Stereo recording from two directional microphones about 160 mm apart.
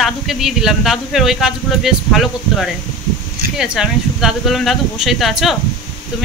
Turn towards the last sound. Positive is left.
turn(degrees=0)  # may be behind; listen again after turning